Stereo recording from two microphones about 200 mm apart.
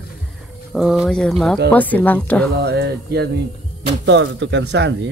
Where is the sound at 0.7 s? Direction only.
Centre (ahead or behind).